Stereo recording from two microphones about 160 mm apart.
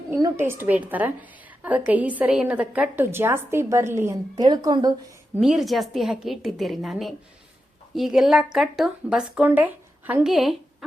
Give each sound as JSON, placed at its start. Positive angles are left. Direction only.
{"t": 0.3, "sound": "a woman's voice", "side_deg": -15}
{"t": 4.4, "sound": "speech", "side_deg": -25}
{"t": 5.4, "sound": "a woman's voice", "side_deg": 0}